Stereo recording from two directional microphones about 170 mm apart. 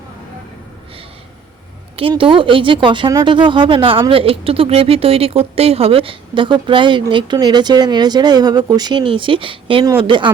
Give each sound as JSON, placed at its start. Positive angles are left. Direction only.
{"t": 2.0, "sound": "a woman's voice", "side_deg": -30}